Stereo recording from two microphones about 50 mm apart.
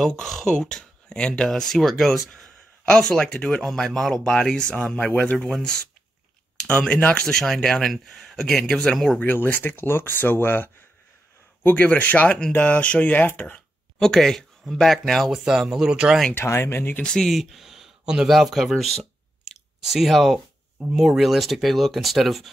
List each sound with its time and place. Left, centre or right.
0.0 s speech: centre
2.8 s speech: centre
3.6 s speech: centre; by 7.2 s left
7.2 s speech: centre
9.2 s speech: left
12.0 s speech: left
13.9 s speech: centre
15.3 s speech: centre
16.3 s speech: left
17.0 s speech: centre
17.3 s speech: centre
18.3 s speech: centre